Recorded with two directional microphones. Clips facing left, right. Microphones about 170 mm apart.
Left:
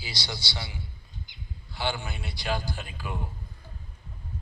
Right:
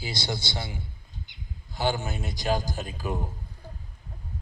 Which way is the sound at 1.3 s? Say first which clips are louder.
Right 1 dB; 65° right (ahead or behind).